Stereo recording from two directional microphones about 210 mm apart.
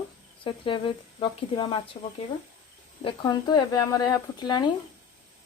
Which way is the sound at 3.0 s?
20° left (ahead or behind).